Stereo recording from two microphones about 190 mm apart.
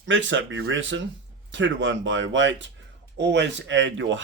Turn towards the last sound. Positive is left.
turn(degrees=-75)  # may be behind; listen again after turning